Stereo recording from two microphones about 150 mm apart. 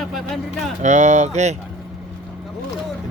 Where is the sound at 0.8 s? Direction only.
50° right (ahead or behind).